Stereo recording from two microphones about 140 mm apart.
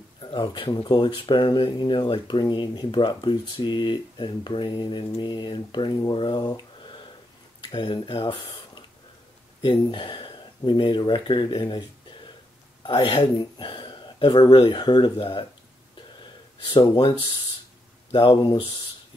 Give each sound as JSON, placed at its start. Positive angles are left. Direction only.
{"t": 0.2, "sound": "speech", "side_deg": 35}
{"t": 16.7, "sound": "speech", "side_deg": 35}